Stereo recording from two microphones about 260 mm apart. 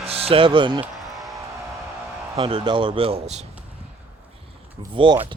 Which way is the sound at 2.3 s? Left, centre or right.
Centre.